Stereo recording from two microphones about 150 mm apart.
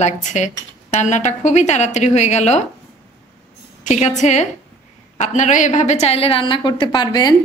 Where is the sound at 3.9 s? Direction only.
50° left (ahead or behind).